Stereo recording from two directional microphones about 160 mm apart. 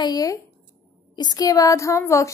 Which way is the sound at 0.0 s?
25° left (ahead or behind).